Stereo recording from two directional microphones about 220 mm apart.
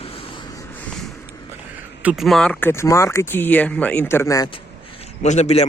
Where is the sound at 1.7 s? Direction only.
5° right (ahead or behind).